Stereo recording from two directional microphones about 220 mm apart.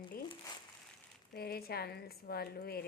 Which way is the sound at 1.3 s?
45° left (ahead or behind).